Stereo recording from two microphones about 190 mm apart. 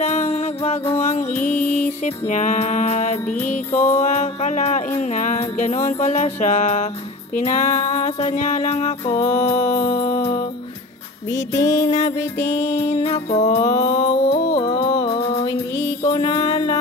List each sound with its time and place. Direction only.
0.0 s music: 35° left (ahead or behind)
9.1 s music: 15° left (ahead or behind)
11.5 s music: 15° left (ahead or behind)
12.5 s music: 35° left (ahead or behind)
13.6 s mantra: 20° left (ahead or behind)
14.0 s music: 40° left (ahead or behind)
14.6 s music: 20° left (ahead or behind)
15.0 s music: 30° left (ahead or behind)